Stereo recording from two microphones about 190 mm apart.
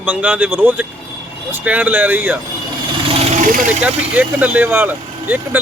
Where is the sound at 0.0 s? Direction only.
10° right (ahead or behind).